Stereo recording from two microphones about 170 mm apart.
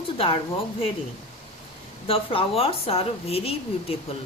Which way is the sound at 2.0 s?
35° left (ahead or behind).